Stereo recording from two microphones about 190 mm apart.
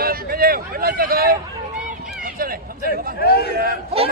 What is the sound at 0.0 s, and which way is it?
Speech, 50° right (ahead or behind).